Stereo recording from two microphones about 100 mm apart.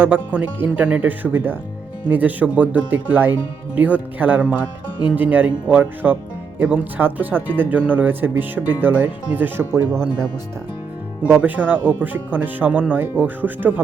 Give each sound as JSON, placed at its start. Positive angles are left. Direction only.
{"t": 0.0, "sound": "speech", "side_deg": -15}
{"t": 9.7, "sound": "speech", "side_deg": -30}
{"t": 11.3, "sound": "speech", "side_deg": -15}